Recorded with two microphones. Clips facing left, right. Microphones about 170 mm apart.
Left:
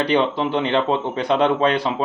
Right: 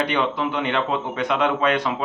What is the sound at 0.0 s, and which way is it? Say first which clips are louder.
A man's voice: left 4 dB; 30° left (ahead or behind).